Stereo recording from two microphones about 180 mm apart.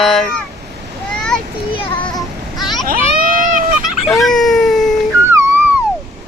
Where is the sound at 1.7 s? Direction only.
25° left (ahead or behind).